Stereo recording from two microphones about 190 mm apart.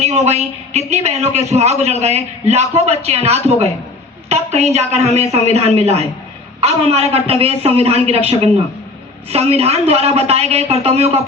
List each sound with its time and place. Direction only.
0.0 s a man's voice: 35° right (ahead or behind)